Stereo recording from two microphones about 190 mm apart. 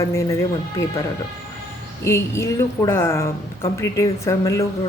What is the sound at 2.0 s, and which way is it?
A woman's voice, 15° left (ahead or behind).